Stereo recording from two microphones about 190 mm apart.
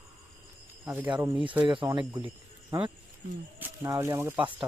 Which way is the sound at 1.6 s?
25° right (ahead or behind).